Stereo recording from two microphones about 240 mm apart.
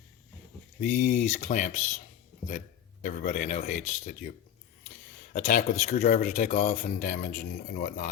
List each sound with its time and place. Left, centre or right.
0.8 s speech: left
5.3 s speech: left